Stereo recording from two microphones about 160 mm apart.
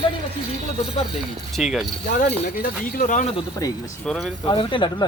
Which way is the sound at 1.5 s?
5° right (ahead or behind).